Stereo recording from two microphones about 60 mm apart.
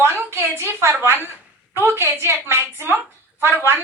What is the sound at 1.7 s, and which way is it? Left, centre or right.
A woman's voice, right.